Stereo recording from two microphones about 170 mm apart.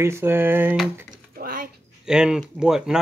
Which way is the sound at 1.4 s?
60° right (ahead or behind).